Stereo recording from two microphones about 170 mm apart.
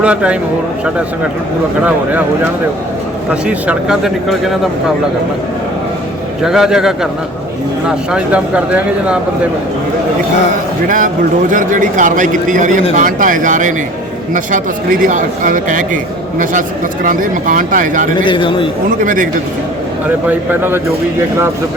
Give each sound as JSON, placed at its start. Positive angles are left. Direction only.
{"t": 0.0, "sound": "speech", "side_deg": -5}
{"t": 1.8, "sound": "speech", "side_deg": -10}
{"t": 6.4, "sound": "speech", "side_deg": -5}
{"t": 10.8, "sound": "a man's voice", "side_deg": -50}
{"t": 18.2, "sound": "a man's voice", "side_deg": 30}
{"t": 18.9, "sound": "a man's voice", "side_deg": -50}
{"t": 20.1, "sound": "speech", "side_deg": -10}